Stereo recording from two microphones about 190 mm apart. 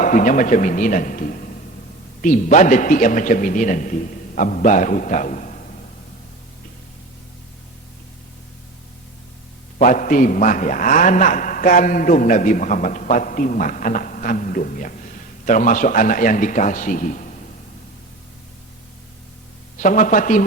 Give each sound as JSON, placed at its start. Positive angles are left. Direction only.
{"t": 0.0, "sound": "a man's voice", "side_deg": 45}
{"t": 9.7, "sound": "a man's voice", "side_deg": 40}
{"t": 19.8, "sound": "a man's voice", "side_deg": 40}